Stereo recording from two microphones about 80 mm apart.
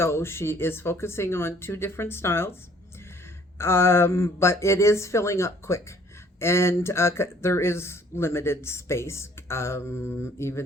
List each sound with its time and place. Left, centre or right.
0.0 s speech: left
3.6 s speech: left